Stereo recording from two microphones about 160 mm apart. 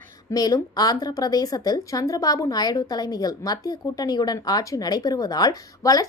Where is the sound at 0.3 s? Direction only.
25° left (ahead or behind).